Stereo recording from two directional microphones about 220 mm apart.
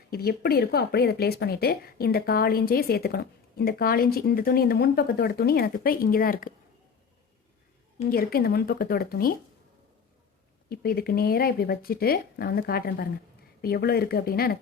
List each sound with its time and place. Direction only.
0.1 s speech: 45° left (ahead or behind)
8.1 s speech: 45° left (ahead or behind)
10.7 s speech: 45° left (ahead or behind)